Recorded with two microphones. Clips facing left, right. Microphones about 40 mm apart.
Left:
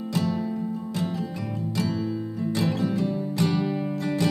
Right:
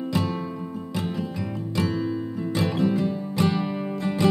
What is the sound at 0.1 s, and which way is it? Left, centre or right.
Music, right.